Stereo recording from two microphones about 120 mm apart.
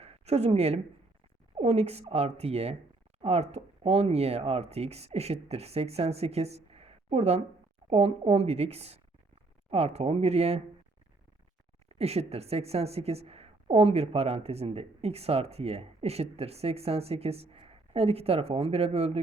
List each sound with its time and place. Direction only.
0.0 s a woman's voice: 60° right (ahead or behind)
11.9 s a woman's voice: 60° right (ahead or behind)